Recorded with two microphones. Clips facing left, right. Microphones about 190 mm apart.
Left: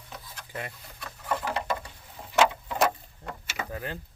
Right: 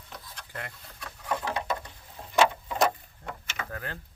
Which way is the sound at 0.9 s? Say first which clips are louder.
Even; centre (ahead or behind).